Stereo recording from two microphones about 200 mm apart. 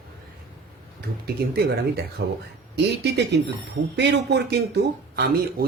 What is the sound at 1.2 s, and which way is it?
Speech, 50° right (ahead or behind).